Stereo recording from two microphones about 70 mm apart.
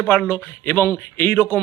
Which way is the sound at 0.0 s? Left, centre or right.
Left.